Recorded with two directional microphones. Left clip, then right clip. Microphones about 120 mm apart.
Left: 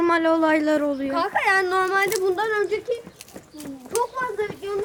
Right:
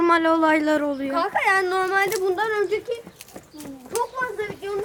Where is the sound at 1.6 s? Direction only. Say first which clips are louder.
Even; 30° right (ahead or behind).